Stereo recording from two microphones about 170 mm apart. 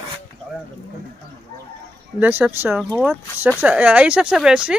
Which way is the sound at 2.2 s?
10° right (ahead or behind).